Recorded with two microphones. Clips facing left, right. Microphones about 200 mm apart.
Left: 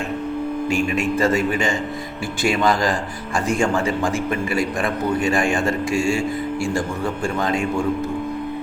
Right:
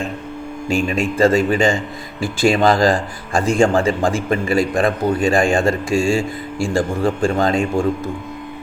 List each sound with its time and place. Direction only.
0.7 s a man's voice: 30° right (ahead or behind)